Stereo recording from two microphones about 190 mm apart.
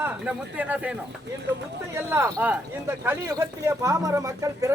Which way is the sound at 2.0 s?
15° right (ahead or behind).